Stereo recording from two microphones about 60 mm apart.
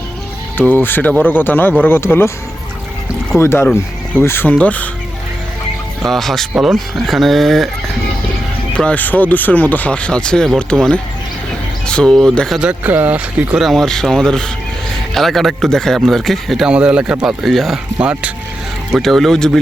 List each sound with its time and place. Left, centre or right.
0.6 s speech: left
3.3 s speech: left
4.4 s speech: left
6.0 s speech: centre
8.7 s speech: centre
12.8 s speech: right
13.6 s speech: centre
16.6 s speech: centre
17.2 s speech: centre
18.0 s speech: right
19.0 s speech: centre